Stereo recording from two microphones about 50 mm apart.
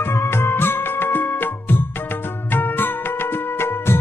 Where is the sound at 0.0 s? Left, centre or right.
Left.